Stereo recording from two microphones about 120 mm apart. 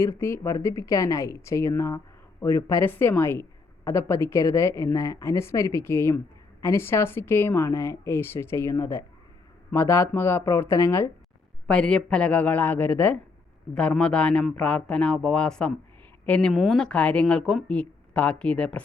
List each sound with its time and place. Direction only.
0.0 s a woman's voice: 20° left (ahead or behind)
11.7 s speech: 5° left (ahead or behind)